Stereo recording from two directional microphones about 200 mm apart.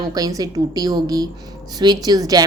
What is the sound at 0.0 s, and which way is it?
A woman's voice, 20° right (ahead or behind).